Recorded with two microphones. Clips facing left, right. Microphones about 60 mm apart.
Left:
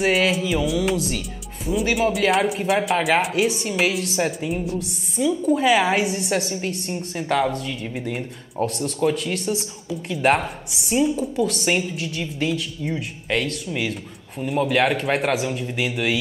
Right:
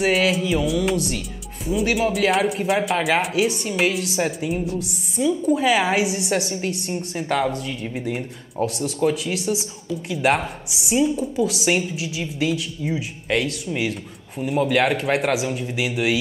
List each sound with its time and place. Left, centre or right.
0.0 s speech: centre